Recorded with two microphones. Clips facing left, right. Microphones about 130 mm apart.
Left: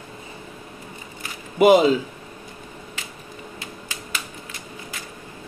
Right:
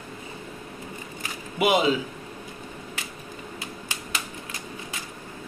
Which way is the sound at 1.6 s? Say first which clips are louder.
Left 8 dB; 40° left (ahead or behind).